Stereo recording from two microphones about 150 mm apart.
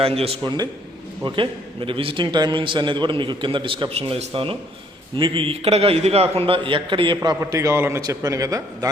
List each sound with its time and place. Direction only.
0.0 s a man's voice: 40° right (ahead or behind); by 8.9 s 25° right (ahead or behind)